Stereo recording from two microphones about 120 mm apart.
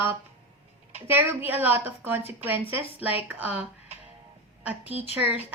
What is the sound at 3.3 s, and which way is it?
A woman's voice, 15° right (ahead or behind).